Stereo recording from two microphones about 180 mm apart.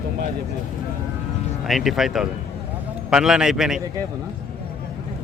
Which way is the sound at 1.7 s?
Centre (ahead or behind).